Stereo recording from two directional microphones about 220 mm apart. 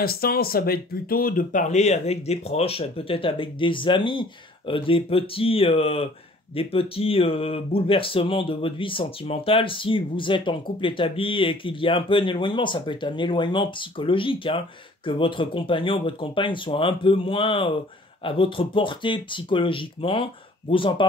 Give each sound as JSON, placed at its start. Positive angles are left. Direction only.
{"t": 0.0, "sound": "speech", "side_deg": 45}